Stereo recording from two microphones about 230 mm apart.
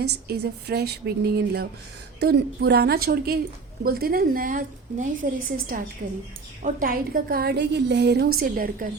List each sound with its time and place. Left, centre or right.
0.0 s a woman's voice: right
6.6 s a woman's voice: right